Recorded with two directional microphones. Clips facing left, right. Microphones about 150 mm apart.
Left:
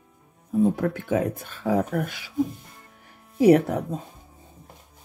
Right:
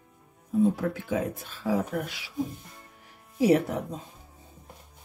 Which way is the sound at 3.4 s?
50° left (ahead or behind).